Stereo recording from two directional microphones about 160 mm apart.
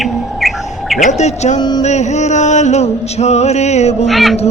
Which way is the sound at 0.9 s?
50° left (ahead or behind).